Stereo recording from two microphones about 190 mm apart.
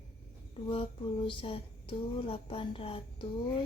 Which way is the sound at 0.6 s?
25° left (ahead or behind).